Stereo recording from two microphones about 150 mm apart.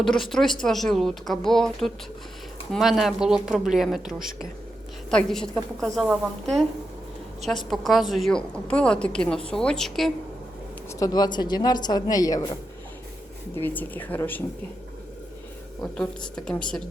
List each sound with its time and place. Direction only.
0.0 s a woman's voice: centre (ahead or behind)
11.0 s speech: 25° left (ahead or behind)
13.6 s a woman's voice: 10° left (ahead or behind)
15.8 s a woman's voice: 5° left (ahead or behind)